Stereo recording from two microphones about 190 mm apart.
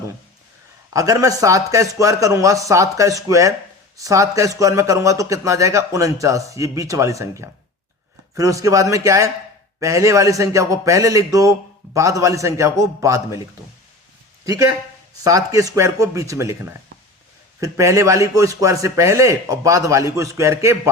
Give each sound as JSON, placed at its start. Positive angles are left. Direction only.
{"t": 0.9, "sound": "a man's voice", "side_deg": -20}
{"t": 14.4, "sound": "a man's voice", "side_deg": -15}
{"t": 17.6, "sound": "a man's voice", "side_deg": -15}